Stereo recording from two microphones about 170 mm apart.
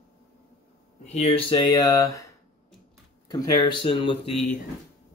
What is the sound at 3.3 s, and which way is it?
Speech, 20° left (ahead or behind).